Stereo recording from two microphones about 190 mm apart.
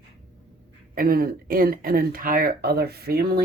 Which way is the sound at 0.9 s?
50° right (ahead or behind).